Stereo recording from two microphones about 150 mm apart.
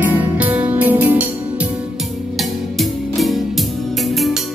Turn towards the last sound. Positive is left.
turn(degrees=0)  # may be behind; listen again after turning